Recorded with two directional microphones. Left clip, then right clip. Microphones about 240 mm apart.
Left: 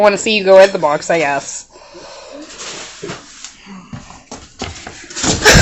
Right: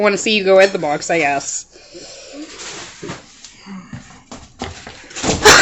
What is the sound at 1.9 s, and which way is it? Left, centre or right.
Wheeze, centre.